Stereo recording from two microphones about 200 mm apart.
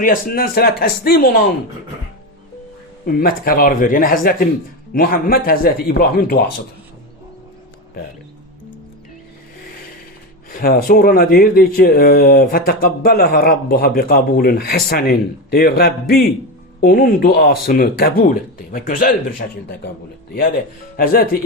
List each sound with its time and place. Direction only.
0.0 s speech: 45° left (ahead or behind)
3.1 s speech: 45° left (ahead or behind)
10.5 s speech: 45° left (ahead or behind)
20.9 s speech: 45° left (ahead or behind)